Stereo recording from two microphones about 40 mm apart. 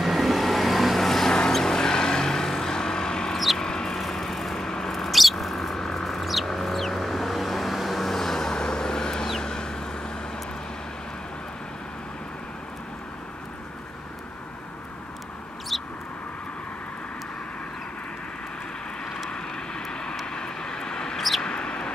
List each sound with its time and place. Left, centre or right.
0.0 s vehicle: centre
3.5 s a sound: centre
5.3 s bird: centre
6.4 s vehicle: centre
15.7 s a sound: centre
19.0 s vehicle: centre